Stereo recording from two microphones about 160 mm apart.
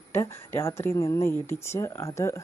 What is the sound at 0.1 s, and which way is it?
Speech, 15° left (ahead or behind).